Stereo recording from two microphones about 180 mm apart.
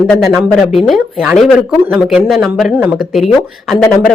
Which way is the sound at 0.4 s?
Centre (ahead or behind).